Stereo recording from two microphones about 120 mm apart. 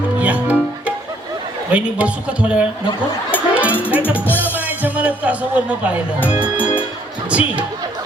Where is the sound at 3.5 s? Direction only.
10° right (ahead or behind).